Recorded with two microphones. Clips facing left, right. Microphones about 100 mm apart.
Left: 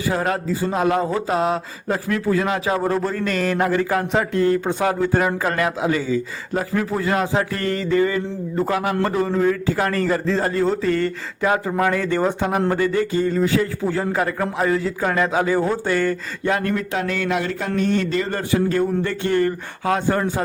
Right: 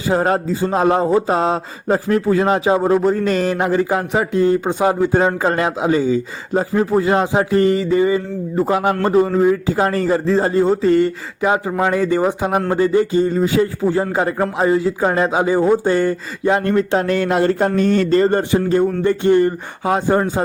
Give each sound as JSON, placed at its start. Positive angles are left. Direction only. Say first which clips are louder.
{"t": 0.1, "sound": "a man's voice", "louder": "right 6 dB", "side_deg": -30}
{"t": 12.5, "sound": "a man's voice", "louder": "right 3 dB", "side_deg": -25}
{"t": 18.5, "sound": "a man's voice", "louder": "right 3 dB", "side_deg": -20}